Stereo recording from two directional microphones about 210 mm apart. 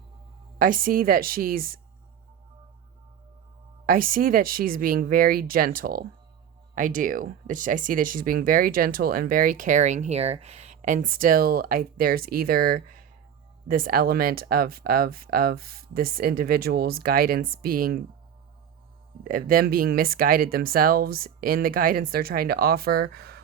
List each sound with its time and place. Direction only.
0.6 s speech: 40° right (ahead or behind)
3.8 s speech: 40° right (ahead or behind)
19.2 s speech: 45° right (ahead or behind)